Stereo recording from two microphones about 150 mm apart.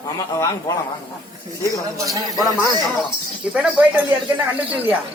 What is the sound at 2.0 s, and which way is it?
Speech, 20° right (ahead or behind).